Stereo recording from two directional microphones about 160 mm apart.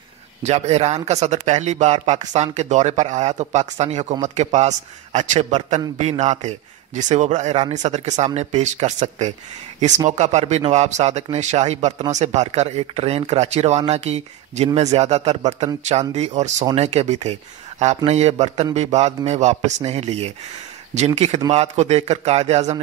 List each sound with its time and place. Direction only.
0.4 s speech: 45° right (ahead or behind)